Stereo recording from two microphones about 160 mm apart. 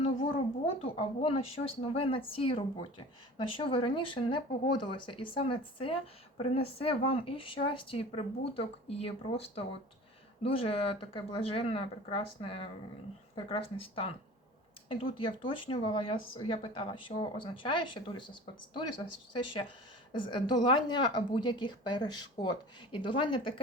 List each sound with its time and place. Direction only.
0.9 s speech: 35° left (ahead or behind)
19.3 s a woman's voice: 30° left (ahead or behind)